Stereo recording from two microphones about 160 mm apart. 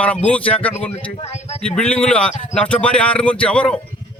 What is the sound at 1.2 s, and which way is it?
Speech, 45° left (ahead or behind).